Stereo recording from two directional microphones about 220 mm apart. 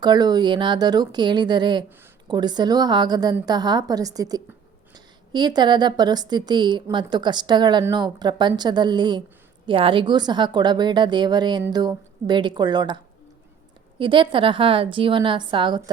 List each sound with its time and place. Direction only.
0.0 s a woman's voice: 20° right (ahead or behind)
14.0 s a woman's voice: 20° right (ahead or behind)